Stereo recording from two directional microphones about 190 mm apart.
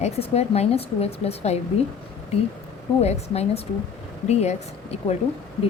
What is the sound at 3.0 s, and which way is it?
Speech, 35° left (ahead or behind).